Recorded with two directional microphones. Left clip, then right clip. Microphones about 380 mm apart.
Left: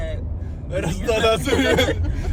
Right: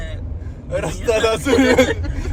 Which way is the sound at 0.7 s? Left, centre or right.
Centre.